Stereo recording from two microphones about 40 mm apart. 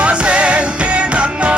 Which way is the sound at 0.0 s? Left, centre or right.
Right.